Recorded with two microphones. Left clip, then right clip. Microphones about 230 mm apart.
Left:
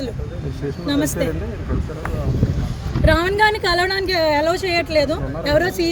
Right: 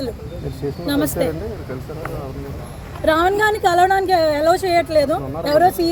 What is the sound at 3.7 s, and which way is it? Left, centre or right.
A woman's voice, left.